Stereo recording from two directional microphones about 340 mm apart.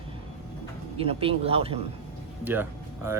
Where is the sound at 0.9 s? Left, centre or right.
Centre.